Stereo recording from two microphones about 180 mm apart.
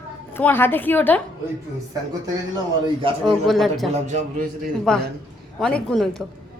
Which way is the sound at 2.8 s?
30° right (ahead or behind).